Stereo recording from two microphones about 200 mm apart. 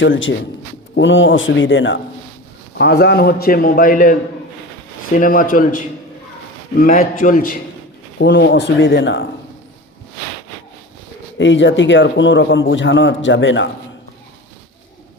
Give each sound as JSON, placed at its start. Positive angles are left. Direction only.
{"t": 0.0, "sound": "speech", "side_deg": 70}
{"t": 2.7, "sound": "a man's voice", "side_deg": 55}
{"t": 8.2, "sound": "speech", "side_deg": 60}
{"t": 11.3, "sound": "speech", "side_deg": 65}